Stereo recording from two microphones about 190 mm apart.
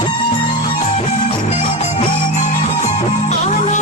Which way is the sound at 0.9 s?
40° left (ahead or behind).